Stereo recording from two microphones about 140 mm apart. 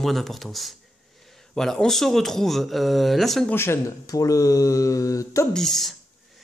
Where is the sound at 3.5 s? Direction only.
15° left (ahead or behind).